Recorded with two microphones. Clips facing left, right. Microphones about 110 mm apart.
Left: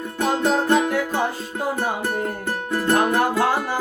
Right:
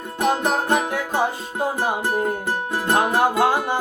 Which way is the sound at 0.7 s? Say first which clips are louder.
Left 2 dB; 15° right (ahead or behind).